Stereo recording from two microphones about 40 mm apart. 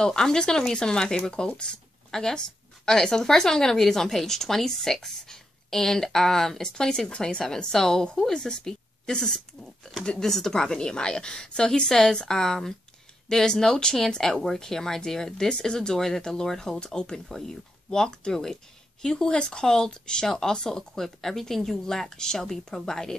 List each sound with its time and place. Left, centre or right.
0.0 s a woman's voice: centre